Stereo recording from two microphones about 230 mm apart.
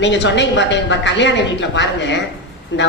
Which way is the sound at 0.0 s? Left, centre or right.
Left.